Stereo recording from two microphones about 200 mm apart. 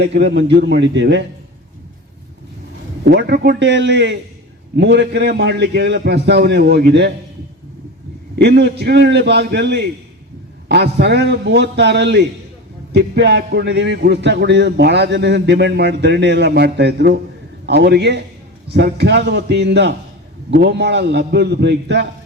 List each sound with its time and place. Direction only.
0.0 s a man's voice: 55° right (ahead or behind)
3.1 s a man's voice: 55° right (ahead or behind)
8.4 s a man's voice: 55° right (ahead or behind)